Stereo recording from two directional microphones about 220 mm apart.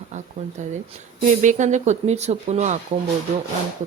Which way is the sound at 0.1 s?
30° right (ahead or behind).